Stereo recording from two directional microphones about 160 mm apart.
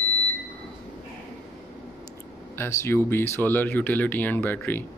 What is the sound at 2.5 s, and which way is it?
Speech, 15° left (ahead or behind).